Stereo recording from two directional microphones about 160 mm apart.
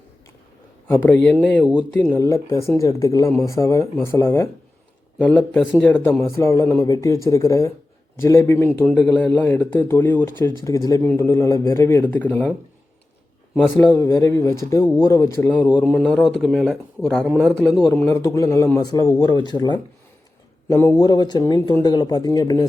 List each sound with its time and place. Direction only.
0.9 s speech: 10° left (ahead or behind)
2.1 s speech: 20° left (ahead or behind)
5.5 s speech: 10° left (ahead or behind)
8.8 s speech: 5° left (ahead or behind)
13.7 s speech: 15° left (ahead or behind)
16.0 s speech: centre (ahead or behind)
17.2 s speech: 10° right (ahead or behind)
18.0 s speech: 20° left (ahead or behind)